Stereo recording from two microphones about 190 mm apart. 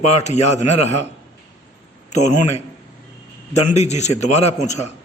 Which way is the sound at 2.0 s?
40° left (ahead or behind).